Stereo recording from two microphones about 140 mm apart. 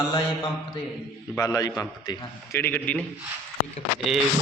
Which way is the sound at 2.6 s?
10° left (ahead or behind).